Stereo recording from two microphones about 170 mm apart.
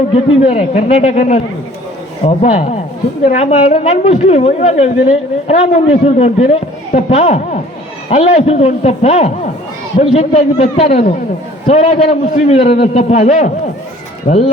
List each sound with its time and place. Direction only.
0.1 s a woman's voice: 40° left (ahead or behind)